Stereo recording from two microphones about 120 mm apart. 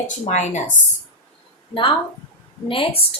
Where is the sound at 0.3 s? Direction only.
75° left (ahead or behind).